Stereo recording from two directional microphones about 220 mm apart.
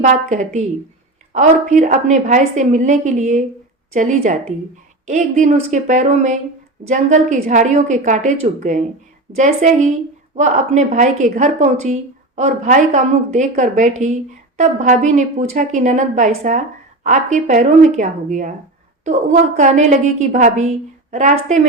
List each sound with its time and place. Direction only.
0.0 s a woman's voice: 35° right (ahead or behind)